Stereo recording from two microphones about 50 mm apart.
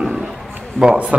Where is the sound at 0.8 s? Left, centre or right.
Centre.